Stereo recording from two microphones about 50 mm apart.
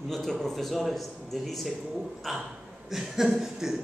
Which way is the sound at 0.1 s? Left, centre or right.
Centre.